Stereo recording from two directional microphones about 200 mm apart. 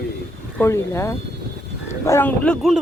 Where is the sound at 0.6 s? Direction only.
10° left (ahead or behind).